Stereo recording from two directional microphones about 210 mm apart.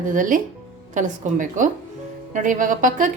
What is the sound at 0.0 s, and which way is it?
Speech, 40° right (ahead or behind).